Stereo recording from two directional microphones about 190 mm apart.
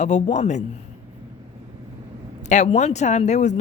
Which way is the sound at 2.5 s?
40° left (ahead or behind).